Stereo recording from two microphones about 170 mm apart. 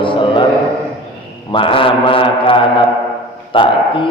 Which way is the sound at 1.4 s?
30° left (ahead or behind).